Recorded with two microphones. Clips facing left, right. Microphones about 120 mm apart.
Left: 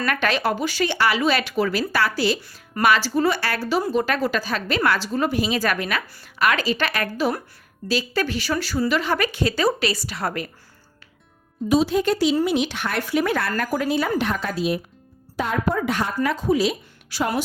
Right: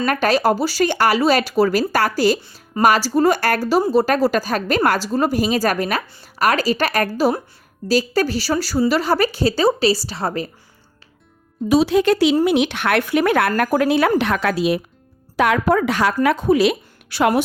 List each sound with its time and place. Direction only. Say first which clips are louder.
0.0 s speech: right 5 dB; 40° right (ahead or behind)
11.7 s a woman's voice: right 4 dB; 85° right
16.2 s speech: right 4 dB; 60° right (ahead or behind)